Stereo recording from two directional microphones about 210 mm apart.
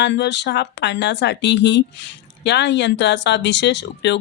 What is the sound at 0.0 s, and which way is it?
Speech, 55° left (ahead or behind).